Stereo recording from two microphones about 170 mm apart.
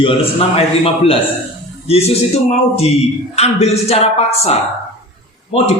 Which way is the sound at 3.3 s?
40° left (ahead or behind).